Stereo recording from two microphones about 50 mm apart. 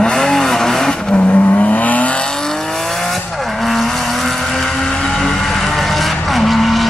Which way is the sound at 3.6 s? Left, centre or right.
Centre.